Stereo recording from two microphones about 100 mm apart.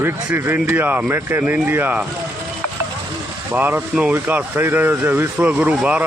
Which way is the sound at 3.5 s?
20° right (ahead or behind).